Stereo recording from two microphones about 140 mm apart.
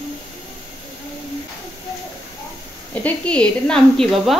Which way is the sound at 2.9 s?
10° left (ahead or behind).